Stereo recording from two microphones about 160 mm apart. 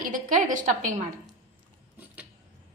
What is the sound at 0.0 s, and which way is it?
A woman's voice, 55° right (ahead or behind).